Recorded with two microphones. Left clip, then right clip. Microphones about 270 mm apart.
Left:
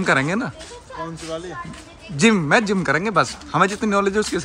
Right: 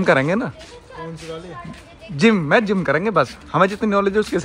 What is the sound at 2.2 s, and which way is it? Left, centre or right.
Speech, centre.